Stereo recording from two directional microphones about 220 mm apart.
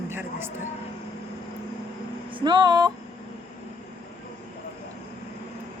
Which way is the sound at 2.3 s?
20° right (ahead or behind).